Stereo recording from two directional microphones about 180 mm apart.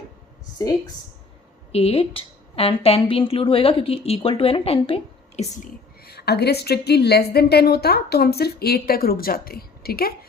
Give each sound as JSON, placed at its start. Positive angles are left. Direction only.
{"t": 1.7, "sound": "a woman's voice", "side_deg": 35}
{"t": 5.5, "sound": "a woman's voice", "side_deg": 60}